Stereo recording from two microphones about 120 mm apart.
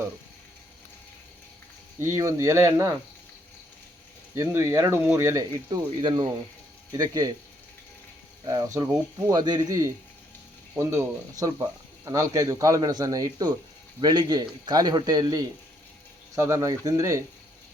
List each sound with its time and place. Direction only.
2.0 s speech: 25° right (ahead or behind)
4.4 s a man's voice: 25° right (ahead or behind)
8.4 s a man's voice: 30° right (ahead or behind)